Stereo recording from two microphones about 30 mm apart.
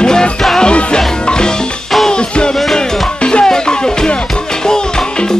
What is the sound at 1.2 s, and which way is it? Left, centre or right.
Music, left.